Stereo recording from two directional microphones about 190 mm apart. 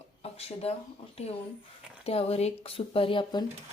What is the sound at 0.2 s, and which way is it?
Speech, 30° left (ahead or behind).